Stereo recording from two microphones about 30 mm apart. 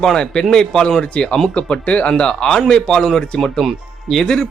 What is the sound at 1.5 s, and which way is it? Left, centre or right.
Speech, left.